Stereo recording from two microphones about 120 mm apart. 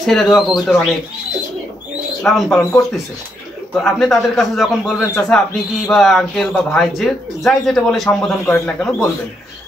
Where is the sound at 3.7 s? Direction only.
Centre (ahead or behind).